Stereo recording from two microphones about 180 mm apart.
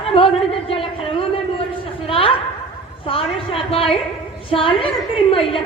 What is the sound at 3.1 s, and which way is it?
A woman's voice, 30° left (ahead or behind).